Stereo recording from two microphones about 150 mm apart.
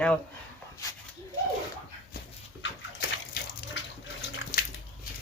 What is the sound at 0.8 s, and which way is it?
Speech, 20° left (ahead or behind).